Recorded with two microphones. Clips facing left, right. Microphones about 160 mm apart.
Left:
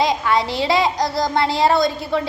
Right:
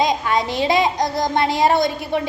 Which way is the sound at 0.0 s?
20° right (ahead or behind).